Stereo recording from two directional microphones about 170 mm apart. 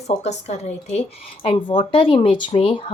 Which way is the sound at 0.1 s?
40° left (ahead or behind).